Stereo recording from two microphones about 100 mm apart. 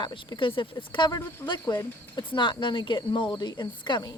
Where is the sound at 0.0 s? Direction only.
50° left (ahead or behind).